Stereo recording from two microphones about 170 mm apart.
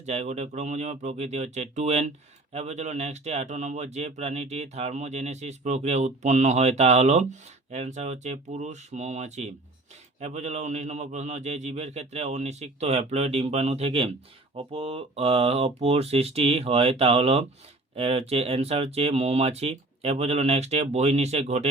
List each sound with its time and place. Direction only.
0.0 s speech: 40° right (ahead or behind)